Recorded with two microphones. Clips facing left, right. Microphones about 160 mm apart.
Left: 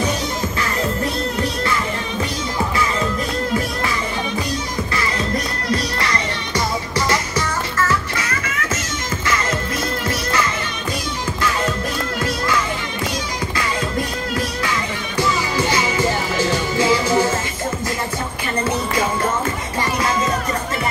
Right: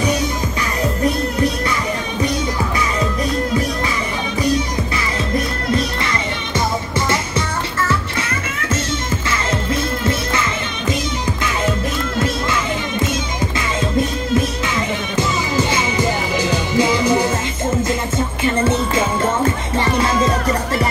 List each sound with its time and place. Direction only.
15.1 s music: 20° right (ahead or behind)